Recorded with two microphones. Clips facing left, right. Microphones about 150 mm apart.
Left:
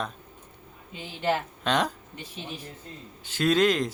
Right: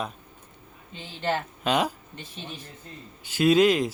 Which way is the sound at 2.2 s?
10° left (ahead or behind).